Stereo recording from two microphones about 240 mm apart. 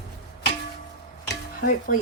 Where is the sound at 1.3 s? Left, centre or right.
Left.